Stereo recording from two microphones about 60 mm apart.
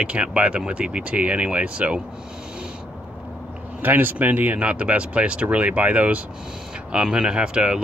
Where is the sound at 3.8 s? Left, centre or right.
Right.